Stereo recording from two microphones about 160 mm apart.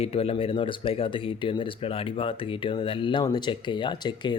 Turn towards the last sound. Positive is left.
turn(degrees=30)  # may be behind; listen again after turning